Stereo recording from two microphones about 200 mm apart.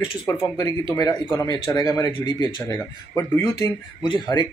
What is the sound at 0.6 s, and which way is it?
Speech, 15° left (ahead or behind).